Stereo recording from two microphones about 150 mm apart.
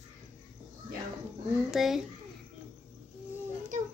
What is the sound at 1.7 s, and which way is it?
Speech, 5° right (ahead or behind).